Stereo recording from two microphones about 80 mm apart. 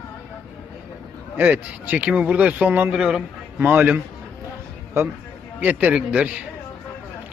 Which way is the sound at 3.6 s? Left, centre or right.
Right.